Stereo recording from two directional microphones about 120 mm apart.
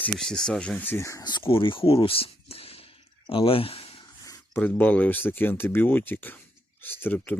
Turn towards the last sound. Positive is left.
turn(degrees=15)  # may be behind; listen again after turning